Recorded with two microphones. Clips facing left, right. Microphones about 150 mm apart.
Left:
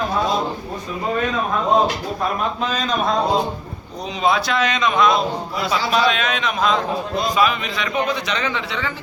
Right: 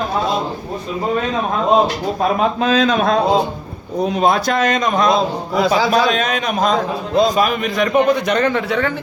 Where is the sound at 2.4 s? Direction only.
85° right.